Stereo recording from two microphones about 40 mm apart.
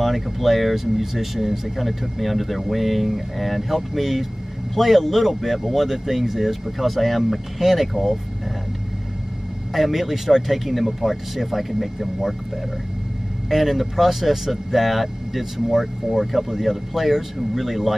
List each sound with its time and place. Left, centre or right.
0.0 s speech: centre
9.7 s speech: centre
13.5 s speech: centre